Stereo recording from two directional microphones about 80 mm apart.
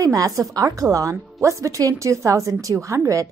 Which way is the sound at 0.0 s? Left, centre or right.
Right.